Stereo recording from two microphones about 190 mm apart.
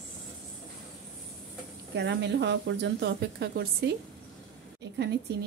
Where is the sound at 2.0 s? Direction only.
65° right (ahead or behind).